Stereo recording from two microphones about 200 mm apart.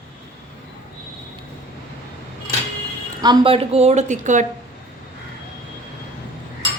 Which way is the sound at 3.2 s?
25° right (ahead or behind).